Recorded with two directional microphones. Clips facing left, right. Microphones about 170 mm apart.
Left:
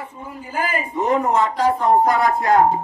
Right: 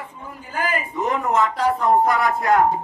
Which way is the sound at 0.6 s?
35° left (ahead or behind).